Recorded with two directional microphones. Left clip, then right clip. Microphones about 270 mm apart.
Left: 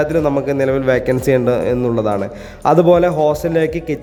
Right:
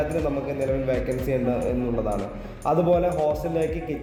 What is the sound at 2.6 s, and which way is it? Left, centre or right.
Speech, left.